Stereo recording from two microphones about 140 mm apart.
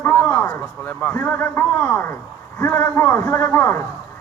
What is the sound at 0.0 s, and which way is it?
A man's voice, 15° left (ahead or behind).